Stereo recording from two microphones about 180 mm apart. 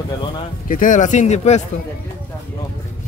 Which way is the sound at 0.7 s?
50° left (ahead or behind).